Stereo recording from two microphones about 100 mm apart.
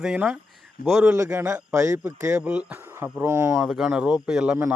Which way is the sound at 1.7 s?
35° right (ahead or behind).